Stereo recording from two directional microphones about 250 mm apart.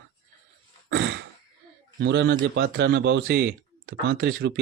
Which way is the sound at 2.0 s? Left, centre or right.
Right.